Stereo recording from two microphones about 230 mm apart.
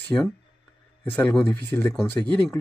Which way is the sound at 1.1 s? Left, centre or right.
Centre.